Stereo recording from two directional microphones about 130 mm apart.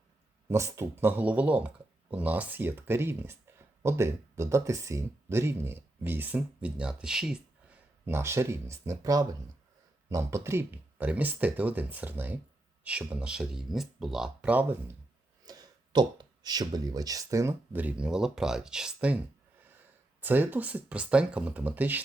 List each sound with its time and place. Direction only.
0.5 s speech: 20° right (ahead or behind)
15.4 s speech: 30° right (ahead or behind); by 19.2 s 10° right (ahead or behind)
20.2 s speech: 15° right (ahead or behind)